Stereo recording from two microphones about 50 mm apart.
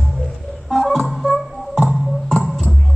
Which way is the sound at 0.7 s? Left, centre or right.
Centre.